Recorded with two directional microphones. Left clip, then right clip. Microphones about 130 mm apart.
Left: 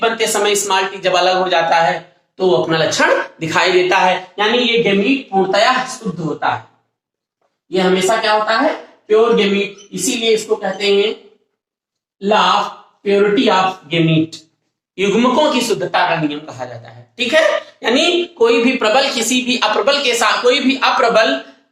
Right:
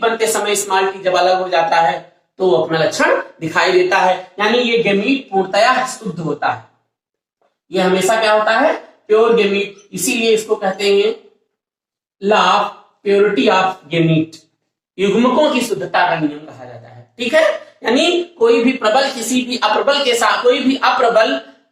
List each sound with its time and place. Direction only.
0.0 s speech: 30° left (ahead or behind)
7.8 s speech: 30° left (ahead or behind)
12.2 s speech: 25° left (ahead or behind)